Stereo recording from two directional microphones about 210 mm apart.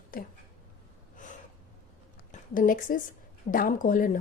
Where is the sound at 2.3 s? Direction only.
40° left (ahead or behind).